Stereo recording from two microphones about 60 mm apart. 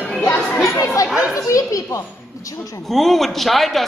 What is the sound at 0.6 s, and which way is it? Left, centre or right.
Speech, left.